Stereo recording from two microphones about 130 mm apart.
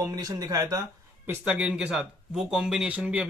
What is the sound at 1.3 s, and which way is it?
Speech, 10° right (ahead or behind).